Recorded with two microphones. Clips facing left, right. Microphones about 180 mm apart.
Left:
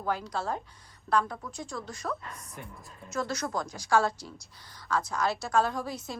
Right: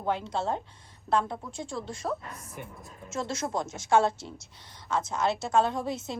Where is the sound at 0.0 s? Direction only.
25° right (ahead or behind).